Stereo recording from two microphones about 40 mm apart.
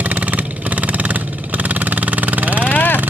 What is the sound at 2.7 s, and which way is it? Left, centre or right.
Vehicle, left.